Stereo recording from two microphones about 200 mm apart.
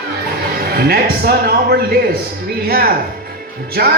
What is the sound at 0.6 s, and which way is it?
A man's voice, 50° right (ahead or behind).